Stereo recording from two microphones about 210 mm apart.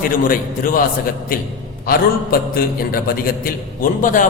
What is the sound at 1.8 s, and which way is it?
A man's voice, 45° left (ahead or behind).